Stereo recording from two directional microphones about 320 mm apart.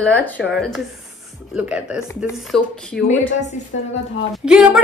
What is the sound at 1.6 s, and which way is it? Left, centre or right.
A woman's voice, centre.